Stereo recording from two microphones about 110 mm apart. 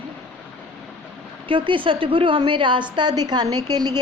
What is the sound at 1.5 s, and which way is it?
A woman's voice, 50° right (ahead or behind).